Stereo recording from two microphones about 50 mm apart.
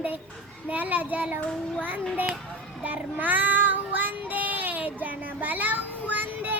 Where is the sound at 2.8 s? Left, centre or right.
Right.